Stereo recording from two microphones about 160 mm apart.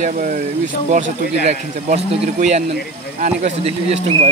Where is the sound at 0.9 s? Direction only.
50° right (ahead or behind).